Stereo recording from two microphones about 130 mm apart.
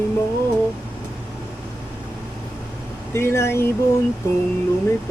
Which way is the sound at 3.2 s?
20° left (ahead or behind).